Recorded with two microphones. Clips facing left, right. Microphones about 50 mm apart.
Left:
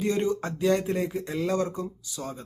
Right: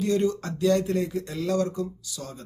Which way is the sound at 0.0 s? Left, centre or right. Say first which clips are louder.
Right 2 dB; left.